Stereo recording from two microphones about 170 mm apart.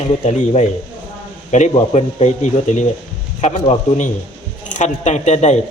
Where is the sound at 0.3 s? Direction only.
45° left (ahead or behind).